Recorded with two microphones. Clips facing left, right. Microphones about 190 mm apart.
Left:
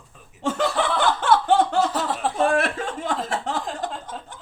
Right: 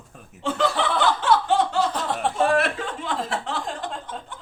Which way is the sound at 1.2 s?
50° left (ahead or behind).